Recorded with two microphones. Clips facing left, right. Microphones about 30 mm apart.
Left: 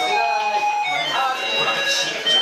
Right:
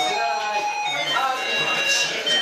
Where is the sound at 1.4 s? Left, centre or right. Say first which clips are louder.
Left 2 dB; left.